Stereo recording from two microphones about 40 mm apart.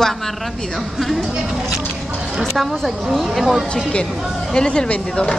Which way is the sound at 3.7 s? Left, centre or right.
Left.